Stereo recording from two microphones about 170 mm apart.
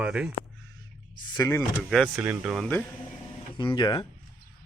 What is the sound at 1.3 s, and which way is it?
Speech, 15° left (ahead or behind).